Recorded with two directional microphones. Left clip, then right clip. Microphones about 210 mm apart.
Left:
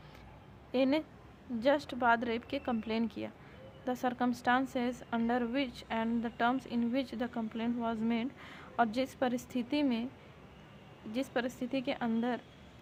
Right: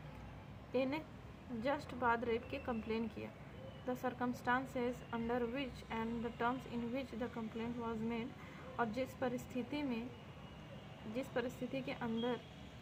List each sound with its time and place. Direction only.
0.7 s a woman's voice: 50° left (ahead or behind)
11.1 s a woman's voice: 50° left (ahead or behind)